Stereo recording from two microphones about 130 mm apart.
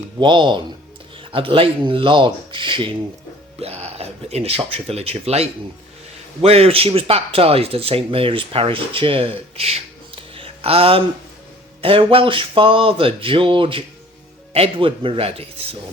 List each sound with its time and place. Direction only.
0.2 s speech: 35° right (ahead or behind)
3.6 s speech: 50° right (ahead or behind)